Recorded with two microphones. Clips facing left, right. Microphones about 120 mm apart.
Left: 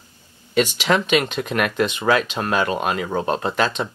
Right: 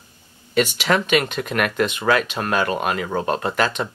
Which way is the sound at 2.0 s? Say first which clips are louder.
Left 1 dB; 15° left (ahead or behind).